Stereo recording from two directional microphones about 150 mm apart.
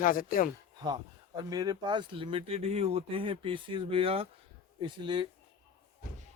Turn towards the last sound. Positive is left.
turn(degrees=-35)  # may be behind; listen again after turning